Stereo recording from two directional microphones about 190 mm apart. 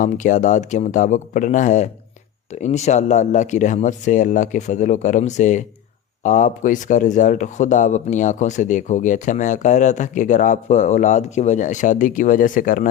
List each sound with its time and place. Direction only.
0.0 s speech: 40° left (ahead or behind)